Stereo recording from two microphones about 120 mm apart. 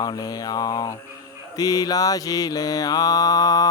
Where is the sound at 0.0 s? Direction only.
35° left (ahead or behind).